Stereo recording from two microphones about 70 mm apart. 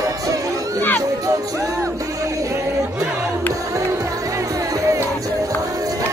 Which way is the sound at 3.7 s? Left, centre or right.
Right.